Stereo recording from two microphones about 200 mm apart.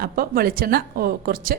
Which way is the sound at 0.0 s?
50° right (ahead or behind).